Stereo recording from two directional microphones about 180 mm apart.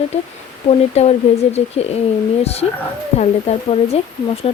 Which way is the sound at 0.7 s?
35° left (ahead or behind).